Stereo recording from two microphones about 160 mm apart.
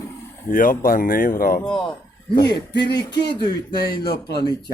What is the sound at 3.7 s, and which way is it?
Speech, 75° left (ahead or behind).